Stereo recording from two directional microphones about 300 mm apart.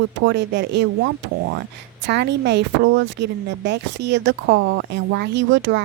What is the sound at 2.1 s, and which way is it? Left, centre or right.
Speech, right.